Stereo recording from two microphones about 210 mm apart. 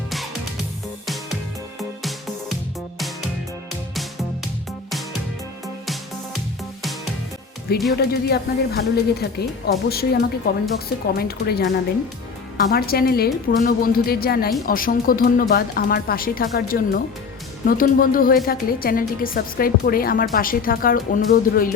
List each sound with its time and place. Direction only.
7.9 s speech: 50° left (ahead or behind)